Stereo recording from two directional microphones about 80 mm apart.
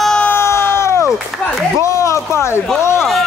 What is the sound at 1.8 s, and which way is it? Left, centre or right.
Speech, left.